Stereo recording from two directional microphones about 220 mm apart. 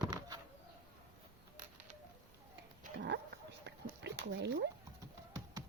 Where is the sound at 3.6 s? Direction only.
50° right (ahead or behind).